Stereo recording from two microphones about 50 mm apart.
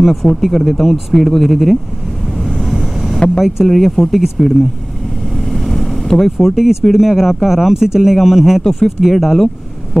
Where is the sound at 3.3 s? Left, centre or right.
Centre.